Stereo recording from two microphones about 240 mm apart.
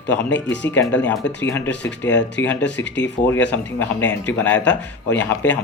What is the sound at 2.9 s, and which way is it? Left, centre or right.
Speech, left.